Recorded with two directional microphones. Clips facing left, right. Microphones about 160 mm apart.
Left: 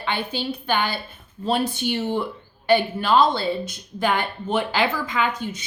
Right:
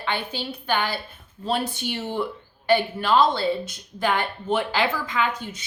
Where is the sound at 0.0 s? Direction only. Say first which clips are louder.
Left 2 dB; 20° left (ahead or behind).